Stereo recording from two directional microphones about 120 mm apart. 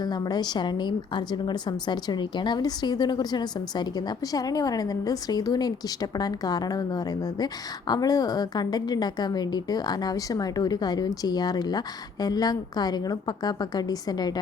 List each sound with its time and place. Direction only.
0.0 s a woman's voice: 35° left (ahead or behind)